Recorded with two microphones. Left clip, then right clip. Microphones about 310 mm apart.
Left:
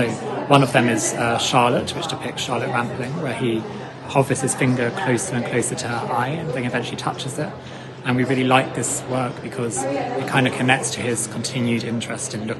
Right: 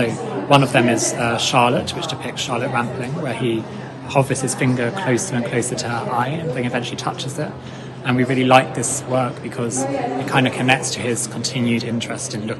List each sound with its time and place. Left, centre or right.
0.0 s a man's voice: centre